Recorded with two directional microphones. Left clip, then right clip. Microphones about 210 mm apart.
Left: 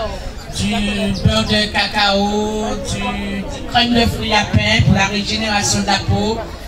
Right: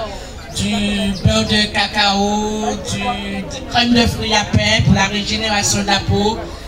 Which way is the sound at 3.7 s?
50° right (ahead or behind).